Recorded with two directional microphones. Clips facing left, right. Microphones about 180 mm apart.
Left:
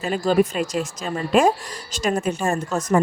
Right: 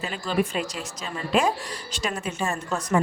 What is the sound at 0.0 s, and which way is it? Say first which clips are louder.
A woman's voice: left 7 dB; 45° left (ahead or behind).